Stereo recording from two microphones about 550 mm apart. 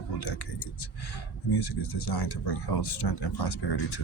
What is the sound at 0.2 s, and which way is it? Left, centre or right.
Speech, left.